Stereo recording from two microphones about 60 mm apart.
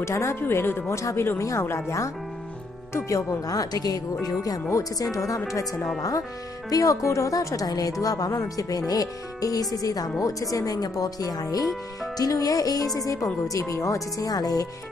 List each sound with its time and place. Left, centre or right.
0.0 s speech: left
1.4 s a woman's voice: left
4.9 s a woman's voice: left
10.2 s a woman's voice: left